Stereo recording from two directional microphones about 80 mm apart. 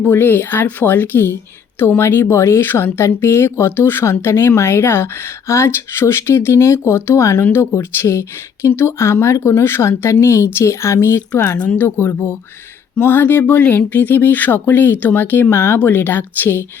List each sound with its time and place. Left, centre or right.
0.1 s speech: left
11.5 s speech: left